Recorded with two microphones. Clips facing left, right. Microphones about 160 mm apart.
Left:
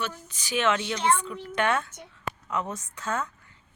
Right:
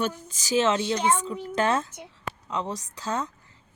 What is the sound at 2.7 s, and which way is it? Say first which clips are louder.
Speech: right 2 dB; 35° right (ahead or behind).